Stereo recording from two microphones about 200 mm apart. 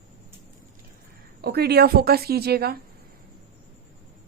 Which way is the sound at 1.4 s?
55° right (ahead or behind).